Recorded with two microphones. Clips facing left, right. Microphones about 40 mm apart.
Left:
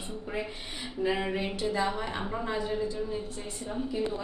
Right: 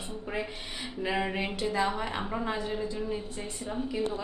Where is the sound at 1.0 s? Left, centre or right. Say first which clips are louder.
Left 1 dB; centre.